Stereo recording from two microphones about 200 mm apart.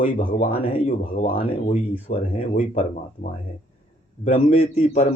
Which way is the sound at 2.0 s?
30° left (ahead or behind).